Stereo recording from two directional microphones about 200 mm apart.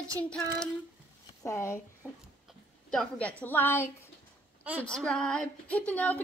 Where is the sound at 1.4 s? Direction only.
15° left (ahead or behind).